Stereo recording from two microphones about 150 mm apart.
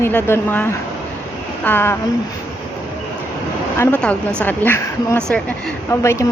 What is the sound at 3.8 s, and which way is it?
Speech, 10° left (ahead or behind).